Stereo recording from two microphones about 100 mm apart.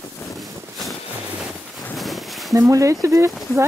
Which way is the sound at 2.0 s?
Centre (ahead or behind).